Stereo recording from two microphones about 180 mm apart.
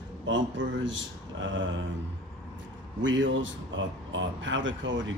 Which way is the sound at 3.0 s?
90° right.